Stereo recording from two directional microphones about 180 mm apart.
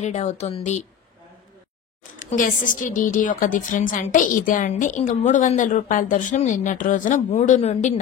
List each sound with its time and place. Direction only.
0.0 s speech: 40° left (ahead or behind)
2.1 s a woman's voice: 45° left (ahead or behind)